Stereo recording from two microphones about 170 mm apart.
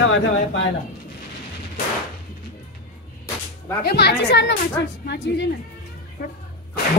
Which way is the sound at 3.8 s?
75° left (ahead or behind).